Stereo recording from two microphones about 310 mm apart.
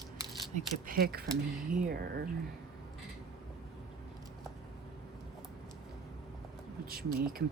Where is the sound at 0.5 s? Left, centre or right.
Right.